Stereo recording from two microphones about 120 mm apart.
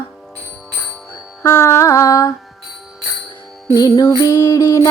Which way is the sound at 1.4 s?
20° left (ahead or behind).